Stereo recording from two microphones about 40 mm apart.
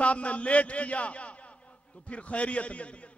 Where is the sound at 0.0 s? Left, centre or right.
Left.